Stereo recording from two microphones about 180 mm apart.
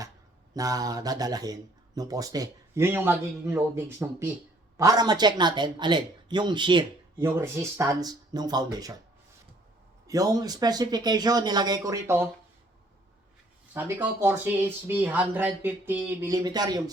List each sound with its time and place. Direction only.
0.5 s a man's voice: 20° right (ahead or behind)
7.3 s a man's voice: 15° right (ahead or behind)
10.1 s a man's voice: 20° right (ahead or behind)
13.7 s speech: 10° right (ahead or behind)